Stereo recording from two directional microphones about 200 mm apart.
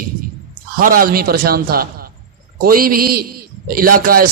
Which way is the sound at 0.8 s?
45° right (ahead or behind).